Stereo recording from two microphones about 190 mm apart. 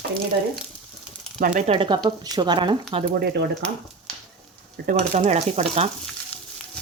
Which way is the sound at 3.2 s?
60° right (ahead or behind).